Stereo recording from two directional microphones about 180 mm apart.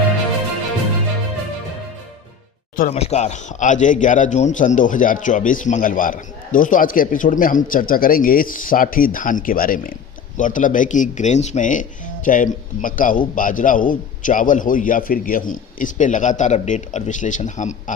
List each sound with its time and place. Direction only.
2.7 s speech: 50° left (ahead or behind)
3.0 s speech: 40° left (ahead or behind)